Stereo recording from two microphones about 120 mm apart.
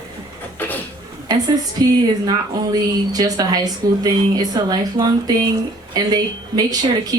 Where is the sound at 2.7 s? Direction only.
30° right (ahead or behind).